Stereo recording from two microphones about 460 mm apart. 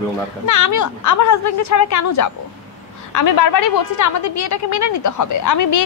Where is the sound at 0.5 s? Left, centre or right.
Left.